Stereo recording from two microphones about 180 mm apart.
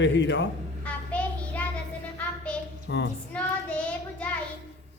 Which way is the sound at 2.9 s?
90° left.